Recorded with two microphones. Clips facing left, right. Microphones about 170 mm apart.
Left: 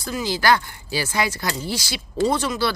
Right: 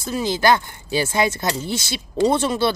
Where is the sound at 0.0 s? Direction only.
25° right (ahead or behind).